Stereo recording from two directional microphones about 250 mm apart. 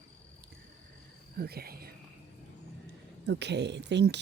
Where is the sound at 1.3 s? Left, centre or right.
Right.